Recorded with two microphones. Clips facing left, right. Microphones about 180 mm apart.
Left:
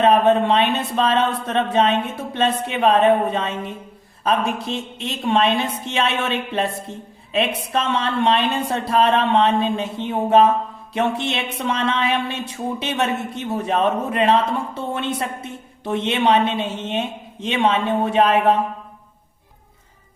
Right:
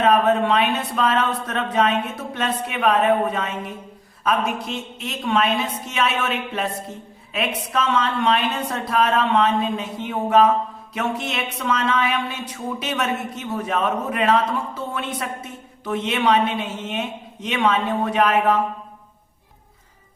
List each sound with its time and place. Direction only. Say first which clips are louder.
0.0 s speech: left 2 dB; 25° left (ahead or behind)